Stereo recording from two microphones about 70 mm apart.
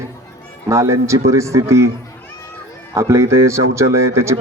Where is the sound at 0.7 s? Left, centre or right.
Right.